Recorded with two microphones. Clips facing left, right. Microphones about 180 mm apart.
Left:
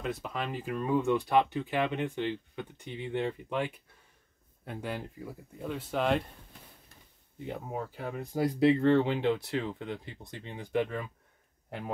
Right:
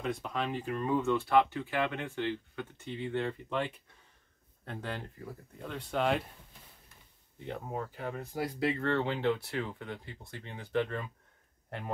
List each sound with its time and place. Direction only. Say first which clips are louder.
0.0 s speech: right 1 dB; centre (ahead or behind)
7.4 s speech: left 1 dB; 5° left (ahead or behind)